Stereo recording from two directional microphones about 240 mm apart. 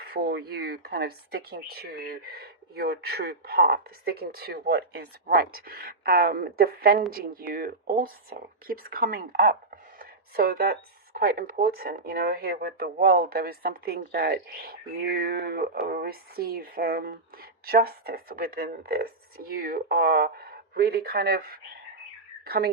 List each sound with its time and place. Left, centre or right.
0.0 s speech: right